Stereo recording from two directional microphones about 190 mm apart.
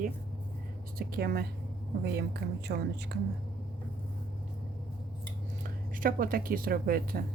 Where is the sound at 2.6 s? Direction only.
60° right (ahead or behind).